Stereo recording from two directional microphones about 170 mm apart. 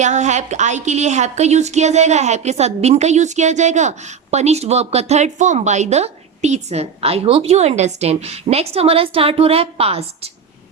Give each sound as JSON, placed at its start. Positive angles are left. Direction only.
{"t": 0.0, "sound": "a woman's voice", "side_deg": -45}